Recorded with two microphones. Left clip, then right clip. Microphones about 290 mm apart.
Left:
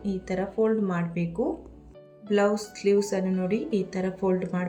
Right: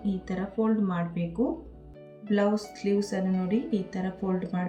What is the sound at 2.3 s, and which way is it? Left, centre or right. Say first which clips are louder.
Speech: left 3 dB; left.